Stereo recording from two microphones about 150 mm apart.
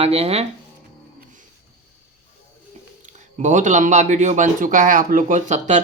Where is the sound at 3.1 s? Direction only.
55° right (ahead or behind).